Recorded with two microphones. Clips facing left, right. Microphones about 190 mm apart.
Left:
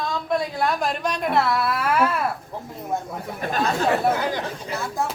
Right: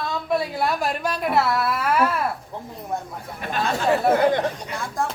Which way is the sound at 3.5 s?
40° left (ahead or behind).